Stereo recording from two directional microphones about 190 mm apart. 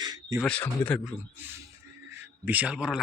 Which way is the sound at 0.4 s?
5° left (ahead or behind).